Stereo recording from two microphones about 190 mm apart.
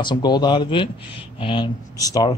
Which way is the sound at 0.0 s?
20° left (ahead or behind).